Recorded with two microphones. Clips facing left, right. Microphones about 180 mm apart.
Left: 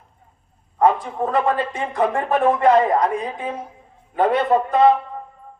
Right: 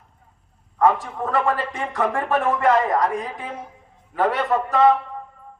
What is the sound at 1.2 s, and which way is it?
A man's voice, 20° left (ahead or behind).